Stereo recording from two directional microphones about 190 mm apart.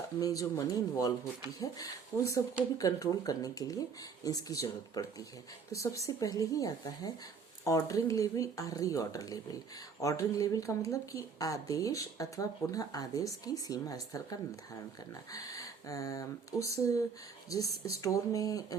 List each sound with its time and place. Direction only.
0.2 s a woman's voice: 20° left (ahead or behind)